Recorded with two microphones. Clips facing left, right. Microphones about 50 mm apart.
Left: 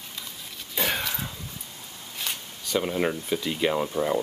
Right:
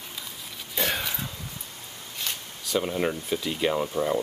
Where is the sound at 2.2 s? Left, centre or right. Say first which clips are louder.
Left 1 dB; centre.